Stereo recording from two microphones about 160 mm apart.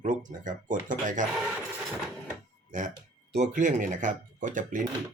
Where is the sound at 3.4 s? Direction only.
50° right (ahead or behind).